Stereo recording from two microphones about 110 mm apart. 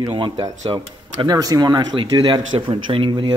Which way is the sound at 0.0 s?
45° right (ahead or behind).